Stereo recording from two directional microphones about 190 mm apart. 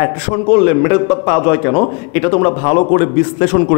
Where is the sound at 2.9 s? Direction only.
55° left (ahead or behind).